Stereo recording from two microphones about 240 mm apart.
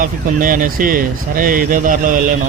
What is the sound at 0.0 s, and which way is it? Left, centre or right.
Speech, right.